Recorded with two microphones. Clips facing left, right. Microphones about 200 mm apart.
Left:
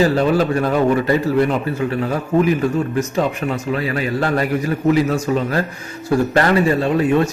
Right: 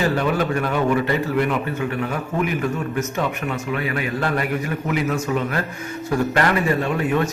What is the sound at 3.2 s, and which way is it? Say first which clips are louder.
A man's voice: left 5 dB; 35° left (ahead or behind).